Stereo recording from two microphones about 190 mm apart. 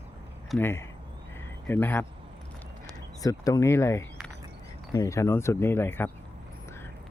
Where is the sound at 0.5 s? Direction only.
15° left (ahead or behind).